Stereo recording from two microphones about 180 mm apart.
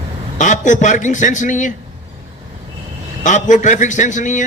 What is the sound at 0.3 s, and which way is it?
A man's voice, 45° left (ahead or behind).